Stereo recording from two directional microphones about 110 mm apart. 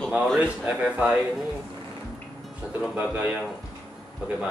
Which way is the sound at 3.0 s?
15° right (ahead or behind).